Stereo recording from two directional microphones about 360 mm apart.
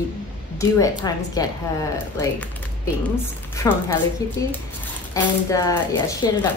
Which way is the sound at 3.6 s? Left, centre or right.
Centre.